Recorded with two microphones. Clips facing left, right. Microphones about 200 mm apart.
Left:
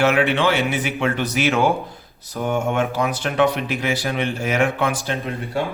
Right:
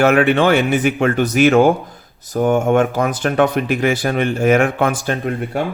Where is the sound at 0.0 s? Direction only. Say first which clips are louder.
Right 5 dB; 50° right (ahead or behind).